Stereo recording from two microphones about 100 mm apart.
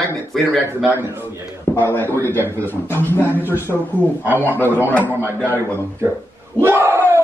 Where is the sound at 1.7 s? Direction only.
20° left (ahead or behind).